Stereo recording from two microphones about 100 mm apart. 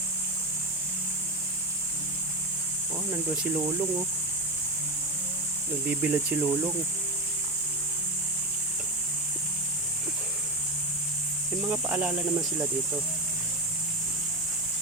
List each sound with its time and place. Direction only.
3.1 s speech: 20° right (ahead or behind)
5.9 s speech: 15° right (ahead or behind)
11.6 s speech: 15° right (ahead or behind)